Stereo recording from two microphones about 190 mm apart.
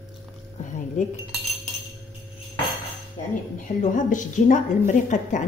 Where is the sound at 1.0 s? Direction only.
40° left (ahead or behind).